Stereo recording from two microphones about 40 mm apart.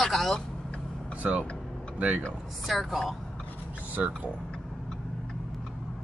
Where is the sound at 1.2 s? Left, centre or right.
Right.